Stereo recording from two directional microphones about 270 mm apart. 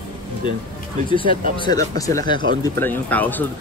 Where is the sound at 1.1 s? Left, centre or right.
Centre.